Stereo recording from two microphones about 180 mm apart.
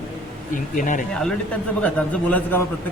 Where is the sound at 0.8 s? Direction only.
45° left (ahead or behind).